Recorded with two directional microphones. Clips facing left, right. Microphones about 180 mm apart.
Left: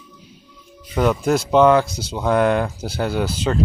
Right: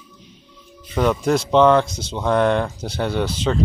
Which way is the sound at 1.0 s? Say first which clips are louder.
Even; 5° left (ahead or behind).